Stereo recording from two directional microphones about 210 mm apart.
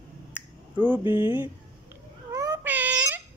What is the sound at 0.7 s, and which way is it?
Speech, 10° right (ahead or behind).